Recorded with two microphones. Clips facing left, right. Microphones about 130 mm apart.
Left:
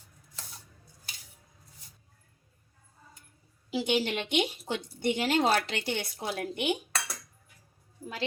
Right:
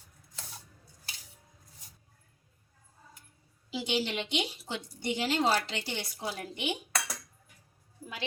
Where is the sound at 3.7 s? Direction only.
50° left (ahead or behind).